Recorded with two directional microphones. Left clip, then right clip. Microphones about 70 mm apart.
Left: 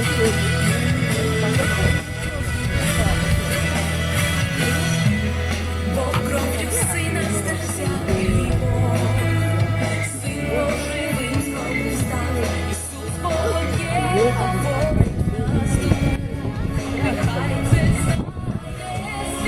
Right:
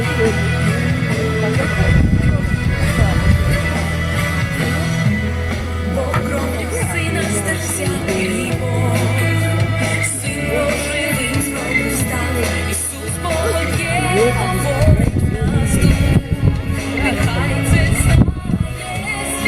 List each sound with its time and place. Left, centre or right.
0.2 s music: left
8.0 s music: right
10.5 s music: right
13.2 s music: right
17.0 s music: right